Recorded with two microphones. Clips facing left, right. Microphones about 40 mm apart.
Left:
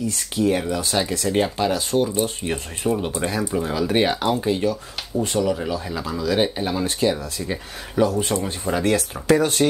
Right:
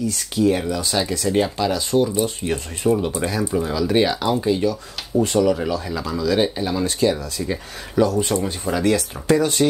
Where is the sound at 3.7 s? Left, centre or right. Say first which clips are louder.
Right 1 dB; left.